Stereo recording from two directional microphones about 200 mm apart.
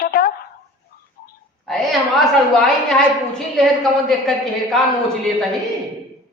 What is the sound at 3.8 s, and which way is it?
Speech, centre (ahead or behind).